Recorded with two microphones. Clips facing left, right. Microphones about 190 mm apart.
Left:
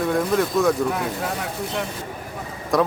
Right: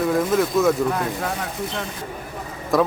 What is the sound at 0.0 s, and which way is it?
Speech, centre (ahead or behind).